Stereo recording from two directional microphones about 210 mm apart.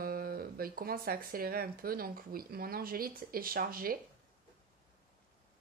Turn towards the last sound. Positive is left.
turn(degrees=-45)  # may be behind; listen again after turning